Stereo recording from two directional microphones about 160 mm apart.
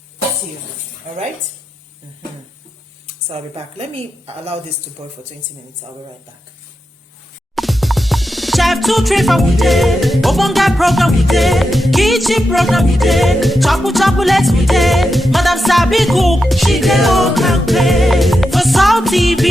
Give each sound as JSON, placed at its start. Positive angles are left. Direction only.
{"t": 3.2, "sound": "a woman's voice", "side_deg": -35}
{"t": 7.5, "sound": "music", "side_deg": 0}